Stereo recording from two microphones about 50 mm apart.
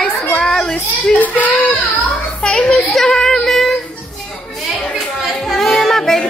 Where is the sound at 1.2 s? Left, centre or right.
Left.